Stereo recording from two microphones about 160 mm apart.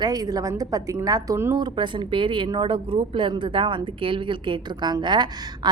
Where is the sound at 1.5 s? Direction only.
30° right (ahead or behind).